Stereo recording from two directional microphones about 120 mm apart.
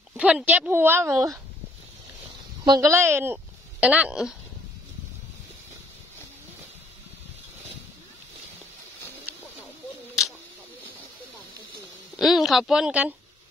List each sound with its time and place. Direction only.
0.1 s speech: 10° right (ahead or behind); by 1.4 s 25° right (ahead or behind)
2.6 s a woman's voice: 35° right (ahead or behind)
2.9 s speech: 20° right (ahead or behind)
9.3 s a sound: 15° right (ahead or behind)
12.2 s speech: centre (ahead or behind)